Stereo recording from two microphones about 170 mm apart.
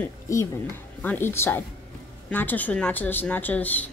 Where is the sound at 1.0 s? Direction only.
10° left (ahead or behind).